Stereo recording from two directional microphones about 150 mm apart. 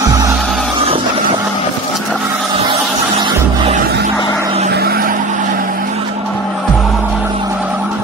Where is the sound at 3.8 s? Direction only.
90° right.